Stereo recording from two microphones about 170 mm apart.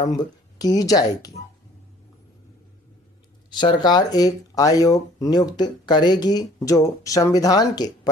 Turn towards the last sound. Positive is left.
turn(degrees=20)  # may be behind; listen again after turning